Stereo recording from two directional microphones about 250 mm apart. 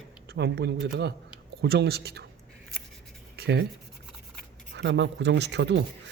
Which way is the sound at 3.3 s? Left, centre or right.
Right.